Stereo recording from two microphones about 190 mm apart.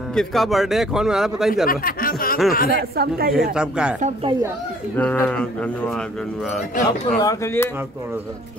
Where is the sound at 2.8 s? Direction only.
55° right (ahead or behind).